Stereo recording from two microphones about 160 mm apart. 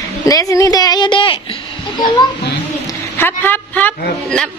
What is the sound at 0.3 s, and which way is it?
Speech, 20° left (ahead or behind).